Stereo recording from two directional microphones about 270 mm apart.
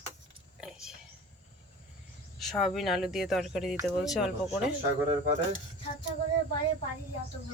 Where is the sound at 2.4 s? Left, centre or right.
Centre.